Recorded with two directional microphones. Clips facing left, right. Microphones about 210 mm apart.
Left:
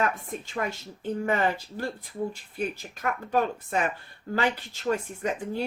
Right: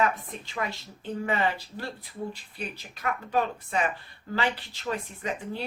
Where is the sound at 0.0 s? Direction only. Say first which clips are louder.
Right 1 dB; 45° left (ahead or behind).